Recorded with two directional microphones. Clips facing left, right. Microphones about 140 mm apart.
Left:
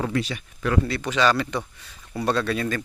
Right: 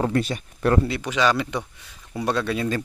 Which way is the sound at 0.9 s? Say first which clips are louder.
Even; 10° right (ahead or behind).